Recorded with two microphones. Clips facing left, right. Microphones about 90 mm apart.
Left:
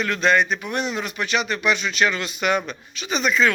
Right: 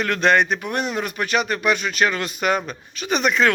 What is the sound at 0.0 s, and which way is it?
Speech, 55° right (ahead or behind).